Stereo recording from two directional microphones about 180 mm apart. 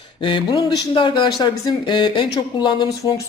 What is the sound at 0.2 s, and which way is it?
Speech, 25° left (ahead or behind).